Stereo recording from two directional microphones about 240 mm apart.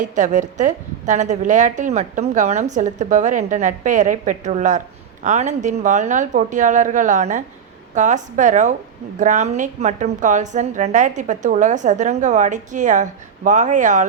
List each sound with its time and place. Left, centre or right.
0.0 s a woman's voice: right